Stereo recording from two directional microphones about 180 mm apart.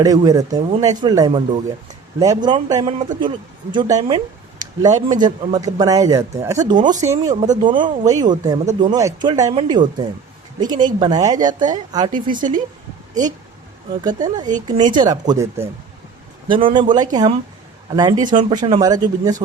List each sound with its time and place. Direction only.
0.0 s a woman's voice: 20° right (ahead or behind)
7.3 s speech: 40° right (ahead or behind)
7.8 s a woman's voice: 25° right (ahead or behind)
12.4 s speech: 45° right (ahead or behind)
14.0 s a woman's voice: 20° right (ahead or behind)
16.5 s a woman's voice: 30° right (ahead or behind)